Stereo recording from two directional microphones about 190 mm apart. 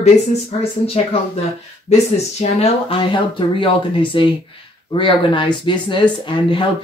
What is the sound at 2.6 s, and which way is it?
Speech, 30° left (ahead or behind).